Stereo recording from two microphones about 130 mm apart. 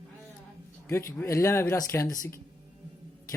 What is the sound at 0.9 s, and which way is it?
Speech, 20° left (ahead or behind).